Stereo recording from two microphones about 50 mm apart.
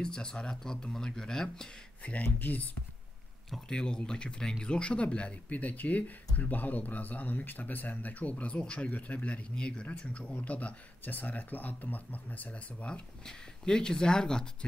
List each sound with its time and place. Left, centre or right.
0.0 s speech: centre
2.2 s speech: left
3.6 s speech: centre